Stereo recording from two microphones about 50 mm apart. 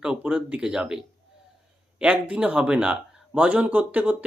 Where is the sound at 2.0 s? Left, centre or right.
Right.